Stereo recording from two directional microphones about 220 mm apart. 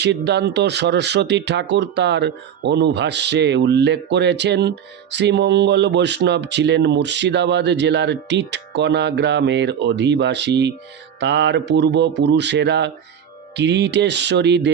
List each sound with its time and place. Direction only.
0.0 s speech: 50° right (ahead or behind)